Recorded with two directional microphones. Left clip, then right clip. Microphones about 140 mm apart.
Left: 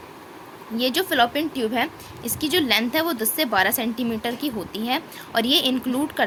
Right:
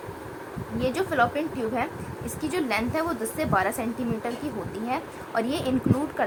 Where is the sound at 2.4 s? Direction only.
55° left (ahead or behind).